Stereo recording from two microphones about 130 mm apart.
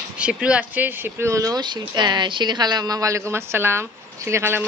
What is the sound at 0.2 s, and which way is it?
A man's voice, 10° right (ahead or behind).